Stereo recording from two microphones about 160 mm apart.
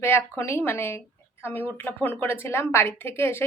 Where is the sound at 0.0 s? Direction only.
15° left (ahead or behind).